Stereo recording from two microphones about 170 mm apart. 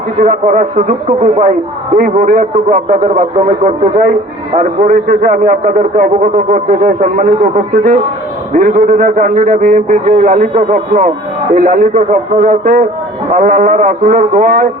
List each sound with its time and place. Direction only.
0.2 s a man's voice: 45° right (ahead or behind)